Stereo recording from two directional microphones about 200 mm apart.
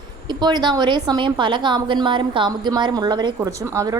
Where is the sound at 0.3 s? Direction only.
20° right (ahead or behind).